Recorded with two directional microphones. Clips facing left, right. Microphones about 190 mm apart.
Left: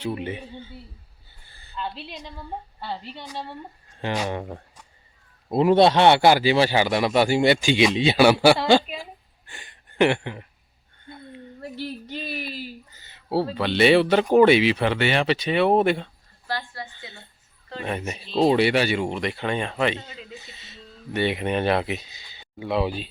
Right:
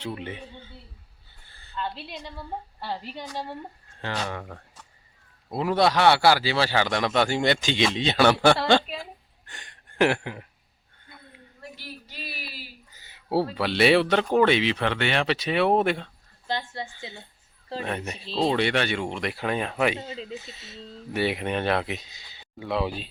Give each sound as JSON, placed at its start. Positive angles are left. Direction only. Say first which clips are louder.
{"t": 0.0, "sound": "a man's voice", "louder": "left 5 dB", "side_deg": 10}
{"t": 4.0, "sound": "a man's voice", "louder": "left 5 dB", "side_deg": 15}
{"t": 9.5, "sound": "a sound", "louder": "left 2 dB", "side_deg": 5}
{"t": 12.5, "sound": "a sound", "louder": "left 9 dB", "side_deg": -10}
{"t": 13.6, "sound": "speech", "louder": "left 3 dB", "side_deg": 0}
{"t": 16.5, "sound": "a woman's voice", "louder": "right 1 dB", "side_deg": -20}
{"t": 17.7, "sound": "speech", "louder": "left 2 dB", "side_deg": 5}
{"t": 20.0, "sound": "speech", "louder": "right 5 dB", "side_deg": -30}
{"t": 20.4, "sound": "speech", "louder": "right 4 dB", "side_deg": 0}